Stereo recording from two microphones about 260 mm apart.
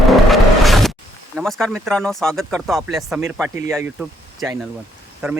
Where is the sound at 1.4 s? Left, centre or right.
Centre.